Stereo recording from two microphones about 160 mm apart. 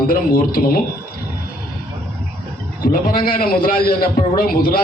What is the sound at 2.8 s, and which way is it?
A man's voice, 60° left (ahead or behind).